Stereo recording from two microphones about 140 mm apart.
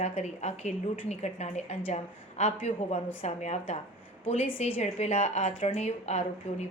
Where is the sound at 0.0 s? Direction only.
50° left (ahead or behind).